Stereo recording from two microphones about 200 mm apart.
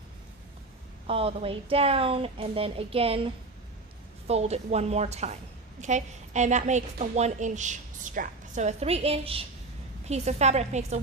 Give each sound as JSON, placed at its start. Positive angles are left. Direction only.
{"t": 1.0, "sound": "a woman's voice", "side_deg": -30}
{"t": 4.3, "sound": "a woman's voice", "side_deg": -30}